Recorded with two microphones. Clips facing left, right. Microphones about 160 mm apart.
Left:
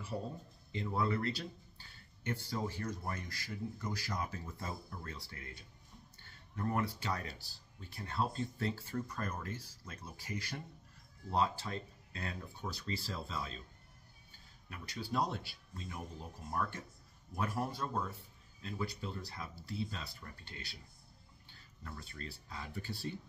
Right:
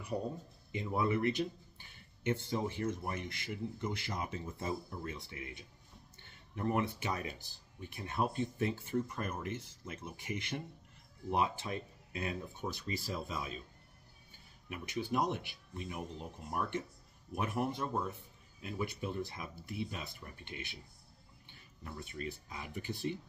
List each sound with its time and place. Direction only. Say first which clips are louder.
0.7 s speech: right 2 dB; 20° right (ahead or behind)
14.7 s speech: right 4 dB; 20° right (ahead or behind)